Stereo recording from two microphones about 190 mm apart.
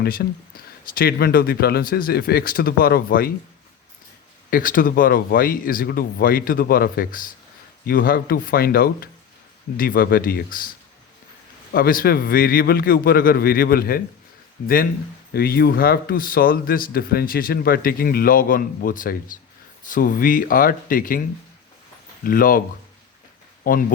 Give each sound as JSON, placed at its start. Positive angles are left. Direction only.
{"t": 0.0, "sound": "a man's voice", "side_deg": 50}
{"t": 4.5, "sound": "a man's voice", "side_deg": 45}
{"t": 11.7, "sound": "a man's voice", "side_deg": 50}
{"t": 15.3, "sound": "a man's voice", "side_deg": 55}
{"t": 23.6, "sound": "a man's voice", "side_deg": 50}